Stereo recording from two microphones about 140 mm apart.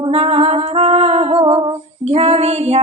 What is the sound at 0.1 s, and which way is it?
Music, 50° right (ahead or behind).